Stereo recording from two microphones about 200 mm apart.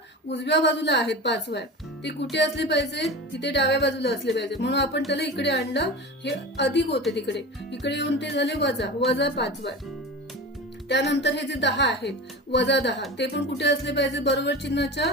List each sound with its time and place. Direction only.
0.3 s speech: 60° left (ahead or behind)
10.8 s speech: 60° left (ahead or behind)